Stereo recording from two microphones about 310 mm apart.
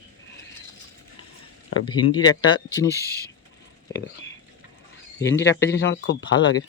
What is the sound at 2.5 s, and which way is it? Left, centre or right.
Speech, centre.